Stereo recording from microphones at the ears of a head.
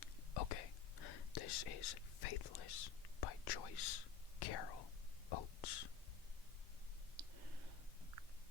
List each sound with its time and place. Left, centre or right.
0.0 s whispering: left
5.3 s a sound: left
7.2 s clicking: right